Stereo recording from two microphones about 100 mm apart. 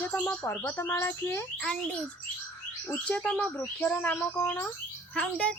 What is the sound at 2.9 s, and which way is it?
Speech, 15° left (ahead or behind).